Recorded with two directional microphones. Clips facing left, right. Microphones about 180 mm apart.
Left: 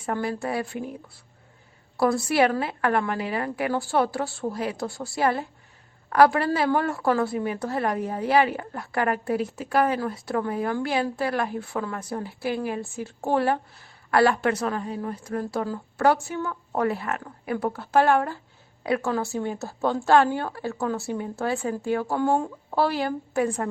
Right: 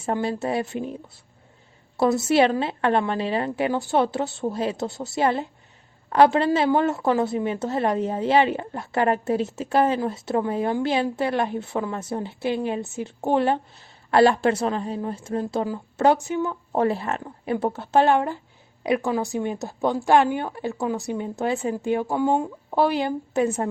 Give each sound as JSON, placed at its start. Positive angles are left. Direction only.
{"t": 0.0, "sound": "a woman's voice", "side_deg": -25}